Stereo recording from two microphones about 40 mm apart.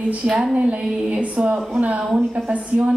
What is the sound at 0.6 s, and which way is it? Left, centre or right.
A woman's voice, right.